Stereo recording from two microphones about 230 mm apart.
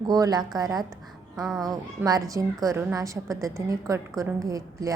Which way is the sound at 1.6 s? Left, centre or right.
Centre.